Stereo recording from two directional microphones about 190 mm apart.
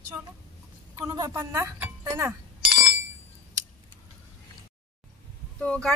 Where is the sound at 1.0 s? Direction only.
15° right (ahead or behind).